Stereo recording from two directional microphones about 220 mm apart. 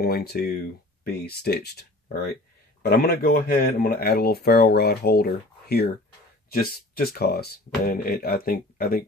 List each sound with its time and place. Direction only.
0.0 s speech: 45° left (ahead or behind)